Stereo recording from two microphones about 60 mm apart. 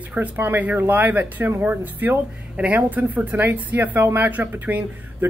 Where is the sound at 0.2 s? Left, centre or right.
Right.